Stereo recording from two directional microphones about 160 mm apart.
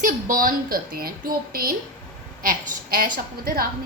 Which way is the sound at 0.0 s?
60° right (ahead or behind).